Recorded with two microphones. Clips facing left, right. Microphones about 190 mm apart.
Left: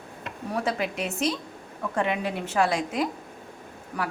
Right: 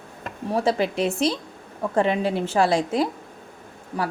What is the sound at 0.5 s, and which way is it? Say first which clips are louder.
A woman's voice: right 6 dB; 30° right (ahead or behind).